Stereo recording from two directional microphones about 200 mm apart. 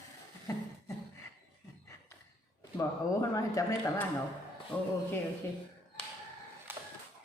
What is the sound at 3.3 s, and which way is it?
Speech, 15° left (ahead or behind).